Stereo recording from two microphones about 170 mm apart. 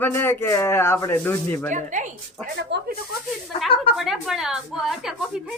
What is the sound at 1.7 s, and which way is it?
Speech, 45° right (ahead or behind).